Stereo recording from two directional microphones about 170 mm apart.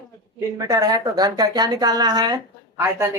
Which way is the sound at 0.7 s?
20° right (ahead or behind).